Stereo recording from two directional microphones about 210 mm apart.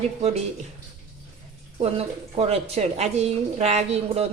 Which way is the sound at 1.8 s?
30° right (ahead or behind).